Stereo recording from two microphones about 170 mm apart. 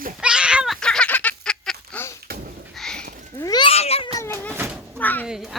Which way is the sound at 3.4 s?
25° left (ahead or behind).